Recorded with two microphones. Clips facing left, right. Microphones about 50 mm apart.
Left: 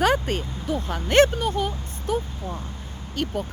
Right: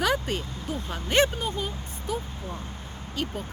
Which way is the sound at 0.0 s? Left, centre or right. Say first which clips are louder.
Left 4 dB; left.